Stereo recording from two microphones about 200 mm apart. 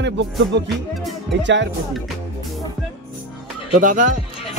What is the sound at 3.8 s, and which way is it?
Speech, 40° right (ahead or behind).